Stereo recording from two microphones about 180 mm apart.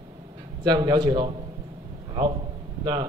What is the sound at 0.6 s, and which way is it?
Speech, 25° right (ahead or behind).